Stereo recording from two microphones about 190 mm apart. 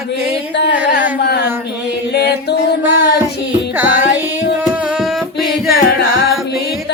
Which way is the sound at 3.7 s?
10° right (ahead or behind).